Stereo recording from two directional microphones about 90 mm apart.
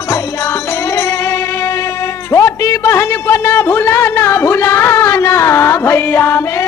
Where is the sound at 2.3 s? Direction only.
35° left (ahead or behind).